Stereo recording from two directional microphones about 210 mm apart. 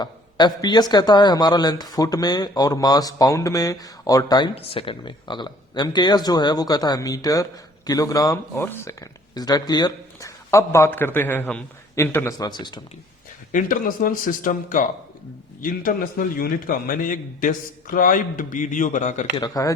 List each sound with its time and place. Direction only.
0.0 s a man's voice: 20° left (ahead or behind)
13.5 s a man's voice: 40° left (ahead or behind)
19.4 s speech: 15° left (ahead or behind)